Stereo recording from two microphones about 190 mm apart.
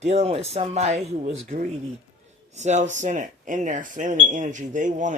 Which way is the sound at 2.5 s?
40° right (ahead or behind).